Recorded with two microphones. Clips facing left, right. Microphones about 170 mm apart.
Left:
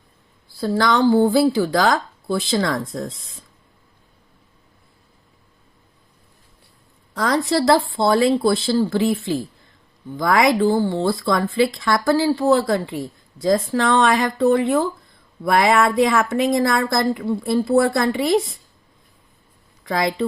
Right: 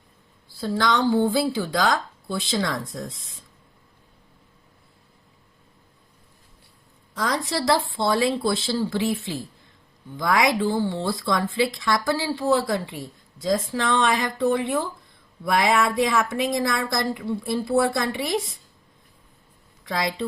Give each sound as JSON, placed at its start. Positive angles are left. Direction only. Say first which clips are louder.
{"t": 0.6, "sound": "speech", "louder": "left 5 dB", "side_deg": 45}
{"t": 7.2, "sound": "speech", "louder": "left 6 dB", "side_deg": 60}
{"t": 15.4, "sound": "speech", "louder": "left 4 dB", "side_deg": 55}
{"t": 19.9, "sound": "speech", "louder": "left 5 dB", "side_deg": 50}